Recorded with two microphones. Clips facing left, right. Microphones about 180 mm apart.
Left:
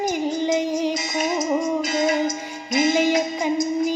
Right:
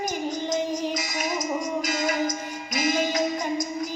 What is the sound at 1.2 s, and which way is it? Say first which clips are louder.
Music: left 7 dB; 25° left (ahead or behind).